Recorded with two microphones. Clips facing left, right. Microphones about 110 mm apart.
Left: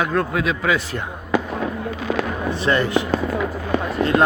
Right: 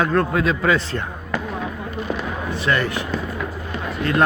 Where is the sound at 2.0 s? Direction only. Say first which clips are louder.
Left 4 dB; 90° left.